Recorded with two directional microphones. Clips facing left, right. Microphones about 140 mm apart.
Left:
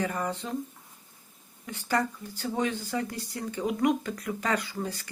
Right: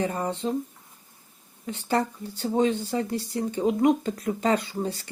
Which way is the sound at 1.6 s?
25° right (ahead or behind).